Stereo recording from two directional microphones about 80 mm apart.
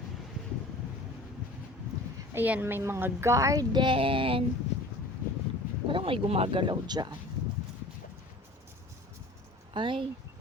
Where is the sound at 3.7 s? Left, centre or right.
Right.